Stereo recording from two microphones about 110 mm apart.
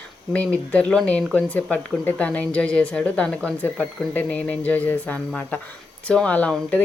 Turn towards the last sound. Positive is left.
turn(degrees=10)  # may be behind; listen again after turning